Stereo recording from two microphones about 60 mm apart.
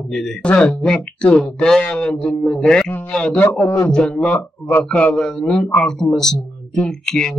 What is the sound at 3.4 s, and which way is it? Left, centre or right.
Speech, left.